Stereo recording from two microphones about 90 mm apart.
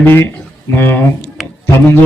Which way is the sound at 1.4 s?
5° right (ahead or behind).